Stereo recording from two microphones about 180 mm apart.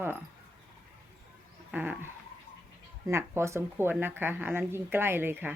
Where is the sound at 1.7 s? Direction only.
10° right (ahead or behind).